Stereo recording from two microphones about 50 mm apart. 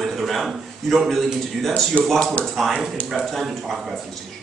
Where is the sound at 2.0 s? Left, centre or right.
Left.